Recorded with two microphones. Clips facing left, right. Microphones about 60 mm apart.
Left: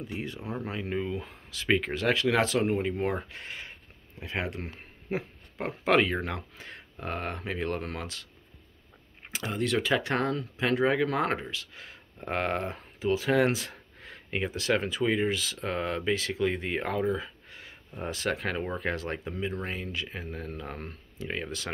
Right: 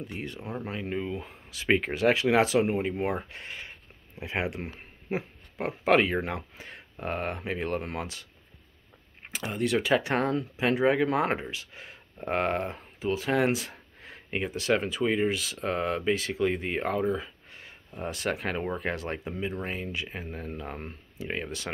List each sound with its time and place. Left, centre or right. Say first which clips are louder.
0.0 s speech: left 1 dB; centre
9.5 s speech: right 2 dB; centre
10.1 s speech: right 2 dB; right
10.5 s speech: right 1 dB; centre